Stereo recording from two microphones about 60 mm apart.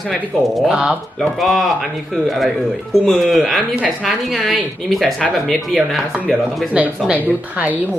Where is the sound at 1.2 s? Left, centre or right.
Centre.